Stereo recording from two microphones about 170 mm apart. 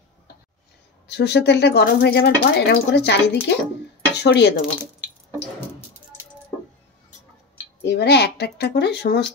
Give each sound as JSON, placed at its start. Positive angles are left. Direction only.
{"t": 1.0, "sound": "speech", "side_deg": 75}
{"t": 7.8, "sound": "speech", "side_deg": 90}